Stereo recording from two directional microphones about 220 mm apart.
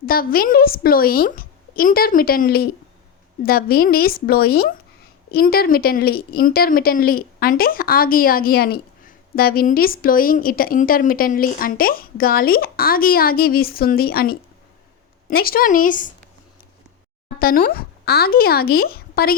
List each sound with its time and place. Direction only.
0.0 s a woman's voice: 40° left (ahead or behind)
17.2 s speech: 40° left (ahead or behind)